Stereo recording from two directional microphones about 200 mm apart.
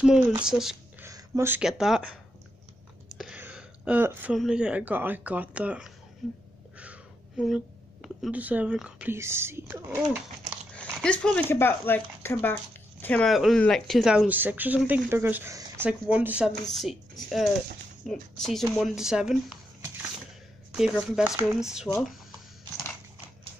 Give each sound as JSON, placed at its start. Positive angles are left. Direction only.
{"t": 0.0, "sound": "speech", "side_deg": -5}
{"t": 1.0, "sound": "speech", "side_deg": -15}
{"t": 3.2, "sound": "speech", "side_deg": -5}
{"t": 10.7, "sound": "speech", "side_deg": 5}
{"t": 20.7, "sound": "speech", "side_deg": 0}